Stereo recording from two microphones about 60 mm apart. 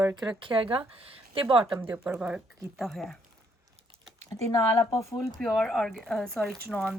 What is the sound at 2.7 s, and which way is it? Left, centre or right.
Speech, centre.